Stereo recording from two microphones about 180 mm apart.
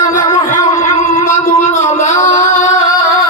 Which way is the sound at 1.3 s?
45° left (ahead or behind).